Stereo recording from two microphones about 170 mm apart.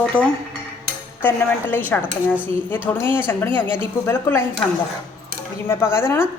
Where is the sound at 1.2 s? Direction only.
15° left (ahead or behind).